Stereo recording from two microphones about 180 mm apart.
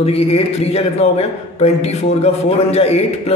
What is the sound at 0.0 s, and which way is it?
A man's voice, 35° left (ahead or behind).